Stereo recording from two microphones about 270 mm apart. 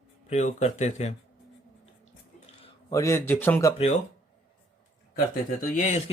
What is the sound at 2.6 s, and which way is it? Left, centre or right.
A man's voice, centre.